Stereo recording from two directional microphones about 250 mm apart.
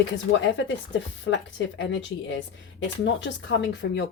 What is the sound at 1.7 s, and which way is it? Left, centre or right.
Speech, left.